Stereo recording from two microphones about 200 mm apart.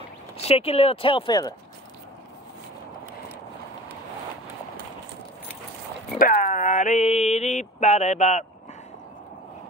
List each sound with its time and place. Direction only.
0.4 s speech: 30° left (ahead or behind)
6.1 s mantra: 45° left (ahead or behind)